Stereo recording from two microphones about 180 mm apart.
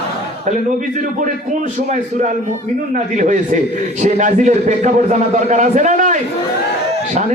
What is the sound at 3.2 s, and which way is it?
A man's voice, 45° right (ahead or behind).